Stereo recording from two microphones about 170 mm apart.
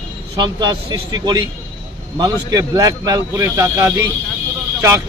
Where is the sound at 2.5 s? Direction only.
20° right (ahead or behind).